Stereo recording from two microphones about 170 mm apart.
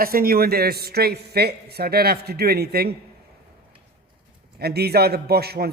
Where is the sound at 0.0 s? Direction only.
60° right (ahead or behind).